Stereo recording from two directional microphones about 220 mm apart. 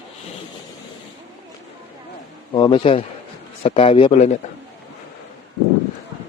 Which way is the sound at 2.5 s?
25° left (ahead or behind).